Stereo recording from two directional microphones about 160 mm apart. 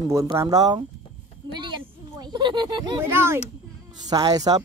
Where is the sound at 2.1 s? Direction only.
30° right (ahead or behind).